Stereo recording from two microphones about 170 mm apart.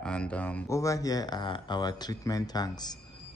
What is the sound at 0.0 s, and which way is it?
Speech, 5° left (ahead or behind).